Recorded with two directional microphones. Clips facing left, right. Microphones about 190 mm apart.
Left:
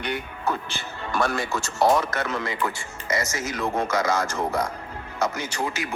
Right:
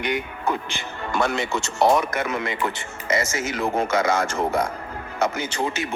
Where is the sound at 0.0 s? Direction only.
15° right (ahead or behind).